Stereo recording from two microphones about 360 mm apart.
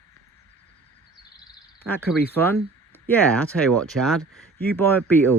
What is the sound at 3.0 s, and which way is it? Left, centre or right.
Speech, centre.